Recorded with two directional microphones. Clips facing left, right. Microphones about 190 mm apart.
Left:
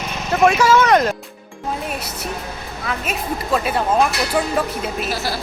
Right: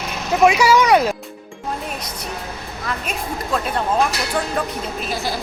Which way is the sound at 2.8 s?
5° left (ahead or behind).